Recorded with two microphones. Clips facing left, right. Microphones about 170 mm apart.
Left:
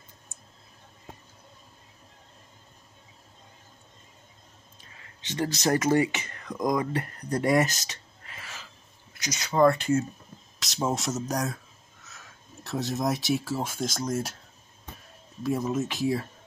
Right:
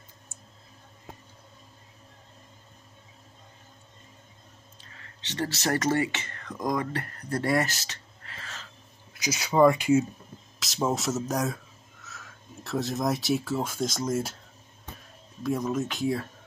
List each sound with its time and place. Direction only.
4.7 s speech: 15° left (ahead or behind)
9.2 s speech: 10° right (ahead or behind)
12.6 s speech: centre (ahead or behind)
15.4 s speech: 5° left (ahead or behind)